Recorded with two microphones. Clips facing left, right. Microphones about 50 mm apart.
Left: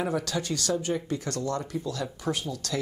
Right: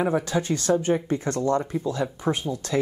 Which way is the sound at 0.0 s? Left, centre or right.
Right.